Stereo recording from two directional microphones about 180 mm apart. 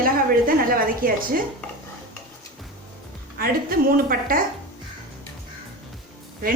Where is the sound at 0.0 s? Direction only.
55° right (ahead or behind).